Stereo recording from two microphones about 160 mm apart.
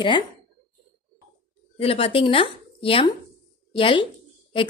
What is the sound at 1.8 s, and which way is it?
A woman's voice, 35° left (ahead or behind).